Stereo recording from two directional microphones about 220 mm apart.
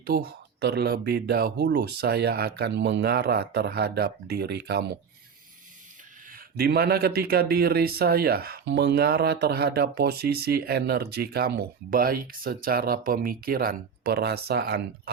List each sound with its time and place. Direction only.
0.0 s speech: 45° right (ahead or behind)
6.3 s speech: 45° right (ahead or behind)